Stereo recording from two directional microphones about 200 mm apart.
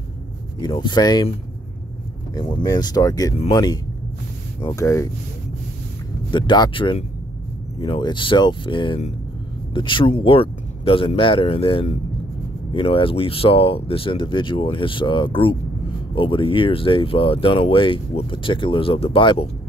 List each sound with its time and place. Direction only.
0.6 s speech: 20° left (ahead or behind)
2.3 s speech: 20° left (ahead or behind)
6.3 s speech: 20° left (ahead or behind)